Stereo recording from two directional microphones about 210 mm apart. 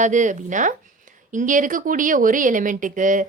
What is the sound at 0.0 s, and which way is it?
Speech, 35° right (ahead or behind).